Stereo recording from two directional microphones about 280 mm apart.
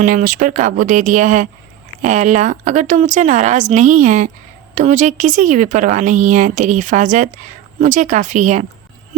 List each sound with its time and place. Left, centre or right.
0.0 s speech: right